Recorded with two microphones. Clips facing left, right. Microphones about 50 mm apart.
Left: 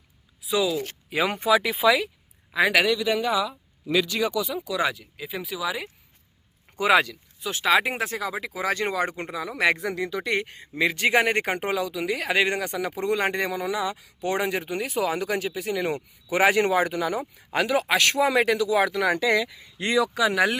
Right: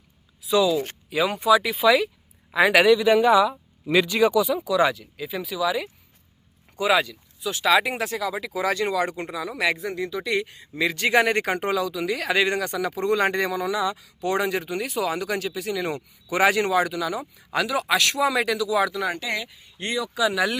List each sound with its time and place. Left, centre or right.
0.4 s speech: centre
1.1 s speech: left
1.6 s speech: centre
2.5 s speech: centre
2.7 s speech: centre
3.1 s speech: right
4.5 s speech: centre
6.9 s speech: left
7.4 s speech: left
9.9 s speech: left
10.2 s speech: left
20.1 s speech: left